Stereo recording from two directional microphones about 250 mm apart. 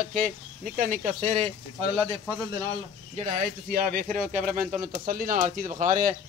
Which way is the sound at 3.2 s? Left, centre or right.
Right.